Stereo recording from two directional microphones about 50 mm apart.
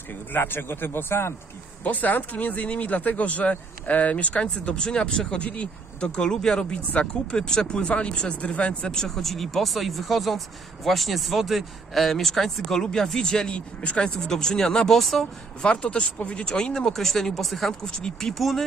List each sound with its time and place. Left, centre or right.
0.3 s speech: left
1.9 s speech: left
8.9 s speech: centre
15.0 s speech: centre
15.6 s speech: centre